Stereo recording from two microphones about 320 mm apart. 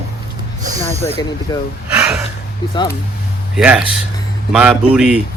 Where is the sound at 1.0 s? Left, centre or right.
Centre.